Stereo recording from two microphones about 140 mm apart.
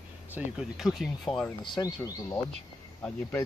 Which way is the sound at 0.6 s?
Centre (ahead or behind).